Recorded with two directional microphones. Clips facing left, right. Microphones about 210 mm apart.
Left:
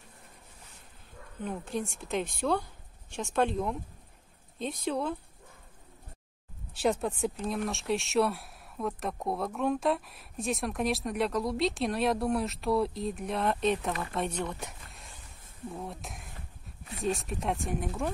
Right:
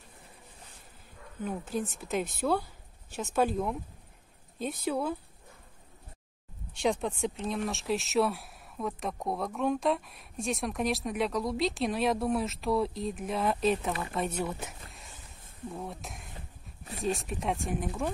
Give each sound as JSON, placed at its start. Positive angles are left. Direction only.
{"t": 1.4, "sound": "speech", "side_deg": 0}
{"t": 6.7, "sound": "speech", "side_deg": 5}